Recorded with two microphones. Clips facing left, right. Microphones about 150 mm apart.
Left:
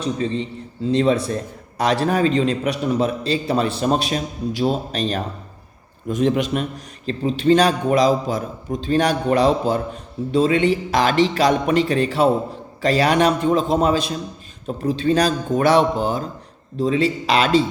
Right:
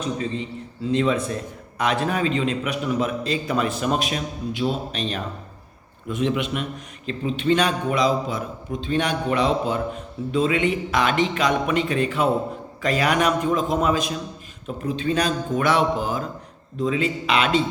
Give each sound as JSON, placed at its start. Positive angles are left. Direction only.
{"t": 0.0, "sound": "a man's voice", "side_deg": 30}